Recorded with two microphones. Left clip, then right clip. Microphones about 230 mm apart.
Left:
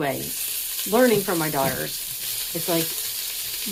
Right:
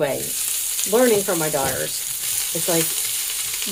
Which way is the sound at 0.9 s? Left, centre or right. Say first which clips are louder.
Right 2 dB; left.